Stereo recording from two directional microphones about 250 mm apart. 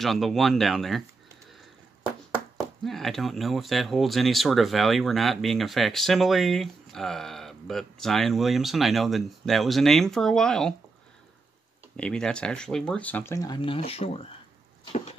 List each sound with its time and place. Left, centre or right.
0.0 s speech: centre
2.3 s speech: centre
12.0 s speech: centre; by 14.2 s left
14.9 s a sound: left